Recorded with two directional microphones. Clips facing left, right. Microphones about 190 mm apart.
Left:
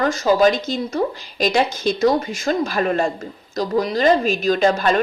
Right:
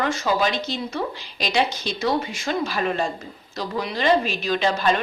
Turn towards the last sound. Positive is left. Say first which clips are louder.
# left 4 dB
turn(degrees=45)  # may be behind; listen again after turning